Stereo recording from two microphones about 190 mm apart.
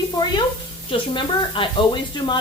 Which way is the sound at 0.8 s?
25° left (ahead or behind).